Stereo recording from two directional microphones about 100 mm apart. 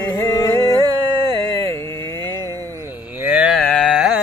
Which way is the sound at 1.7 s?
30° left (ahead or behind).